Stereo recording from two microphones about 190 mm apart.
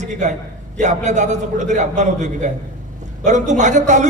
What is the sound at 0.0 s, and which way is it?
A man's voice, 40° right (ahead or behind).